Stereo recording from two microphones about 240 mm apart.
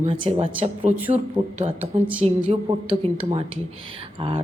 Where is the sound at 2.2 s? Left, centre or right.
Right.